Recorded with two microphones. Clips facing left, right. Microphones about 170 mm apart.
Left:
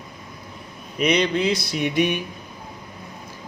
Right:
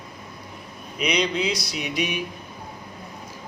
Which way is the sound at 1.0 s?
50° left (ahead or behind).